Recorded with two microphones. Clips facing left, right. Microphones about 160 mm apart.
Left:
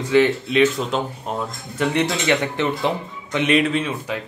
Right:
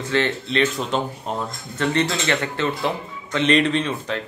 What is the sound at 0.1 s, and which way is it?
Speech, 10° left (ahead or behind).